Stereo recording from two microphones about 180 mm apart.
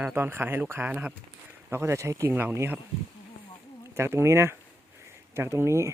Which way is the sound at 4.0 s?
15° right (ahead or behind).